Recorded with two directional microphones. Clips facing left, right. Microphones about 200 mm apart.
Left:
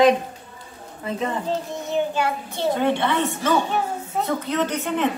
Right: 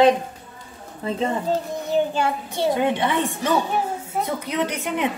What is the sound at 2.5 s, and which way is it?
A woman's voice, 15° right (ahead or behind).